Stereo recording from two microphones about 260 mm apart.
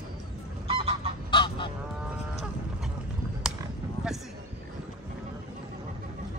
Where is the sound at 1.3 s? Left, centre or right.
Centre.